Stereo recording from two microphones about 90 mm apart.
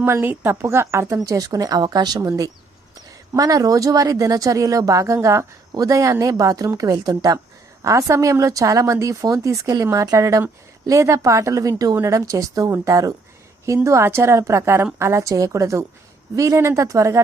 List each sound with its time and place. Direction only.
0.0 s a woman's voice: 25° right (ahead or behind)